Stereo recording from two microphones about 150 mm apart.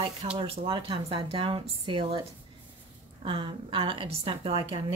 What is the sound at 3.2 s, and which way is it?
Speech, 35° right (ahead or behind).